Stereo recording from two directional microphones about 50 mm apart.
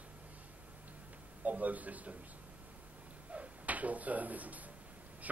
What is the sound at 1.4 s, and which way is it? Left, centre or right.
Speech, right.